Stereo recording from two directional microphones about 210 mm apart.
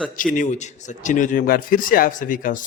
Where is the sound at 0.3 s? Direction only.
35° left (ahead or behind).